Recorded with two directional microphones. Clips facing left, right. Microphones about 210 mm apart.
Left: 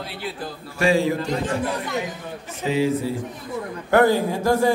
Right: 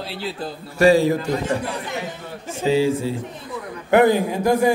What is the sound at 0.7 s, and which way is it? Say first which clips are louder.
Speech: right 5 dB; 40° right (ahead or behind).